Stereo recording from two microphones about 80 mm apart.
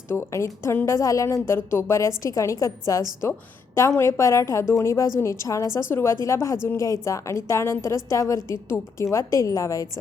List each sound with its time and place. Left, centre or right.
0.1 s a woman's voice: left